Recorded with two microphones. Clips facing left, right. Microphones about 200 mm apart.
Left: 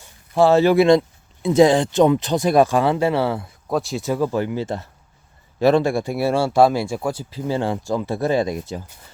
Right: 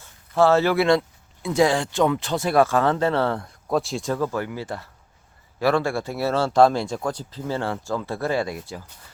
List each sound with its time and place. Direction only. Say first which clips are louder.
0.0 s speech: left 2 dB; 15° left (ahead or behind)